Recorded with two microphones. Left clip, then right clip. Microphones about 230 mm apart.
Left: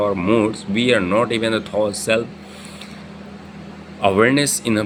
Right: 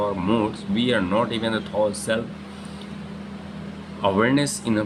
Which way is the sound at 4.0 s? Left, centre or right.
Left.